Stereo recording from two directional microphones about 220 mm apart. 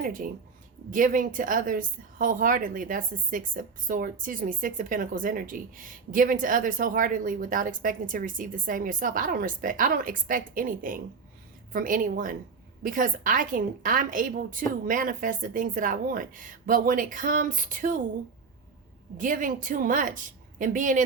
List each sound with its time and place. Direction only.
0.0 s a woman's voice: 40° right (ahead or behind)
19.1 s a woman's voice: 35° right (ahead or behind)